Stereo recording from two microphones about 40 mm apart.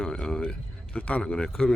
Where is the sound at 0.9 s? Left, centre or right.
Left.